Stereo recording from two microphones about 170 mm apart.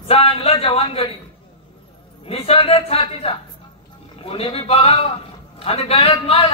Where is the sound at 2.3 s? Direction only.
35° left (ahead or behind).